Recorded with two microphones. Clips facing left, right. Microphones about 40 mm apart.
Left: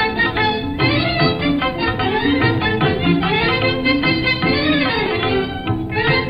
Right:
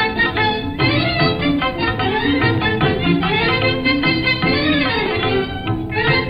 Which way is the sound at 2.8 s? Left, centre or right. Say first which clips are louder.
Left 1 dB; right.